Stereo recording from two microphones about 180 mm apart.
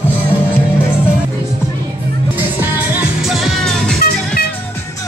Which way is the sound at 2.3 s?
10° right (ahead or behind).